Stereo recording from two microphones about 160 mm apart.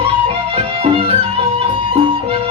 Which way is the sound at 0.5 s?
35° right (ahead or behind).